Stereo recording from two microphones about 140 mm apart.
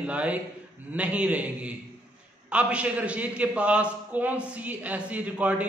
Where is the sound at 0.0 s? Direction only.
10° right (ahead or behind).